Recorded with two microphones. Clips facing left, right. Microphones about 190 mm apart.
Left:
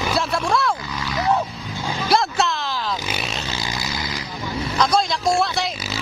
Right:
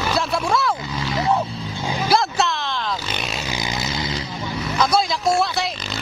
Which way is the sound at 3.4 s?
20° right (ahead or behind).